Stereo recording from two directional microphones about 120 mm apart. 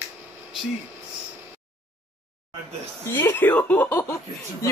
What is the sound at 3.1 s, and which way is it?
Speech, 20° left (ahead or behind).